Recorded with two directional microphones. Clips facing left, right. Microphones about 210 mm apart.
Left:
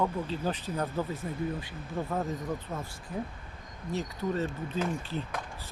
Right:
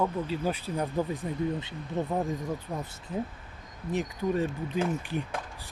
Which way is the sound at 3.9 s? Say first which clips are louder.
Right 3 dB; 15° right (ahead or behind).